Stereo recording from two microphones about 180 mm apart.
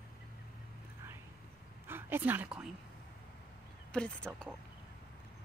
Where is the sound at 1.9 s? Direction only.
10° right (ahead or behind).